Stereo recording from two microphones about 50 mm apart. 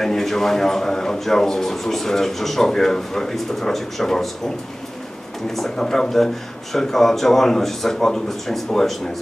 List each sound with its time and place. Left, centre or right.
0.0 s a man's voice: centre
5.6 s a man's voice: centre